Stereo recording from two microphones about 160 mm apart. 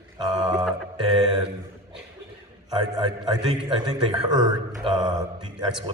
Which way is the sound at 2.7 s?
25° right (ahead or behind).